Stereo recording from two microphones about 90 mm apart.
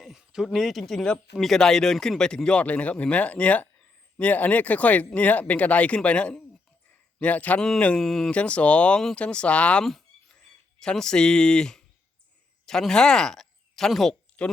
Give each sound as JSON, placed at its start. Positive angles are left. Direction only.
{"t": 0.0, "sound": "speech", "side_deg": -5}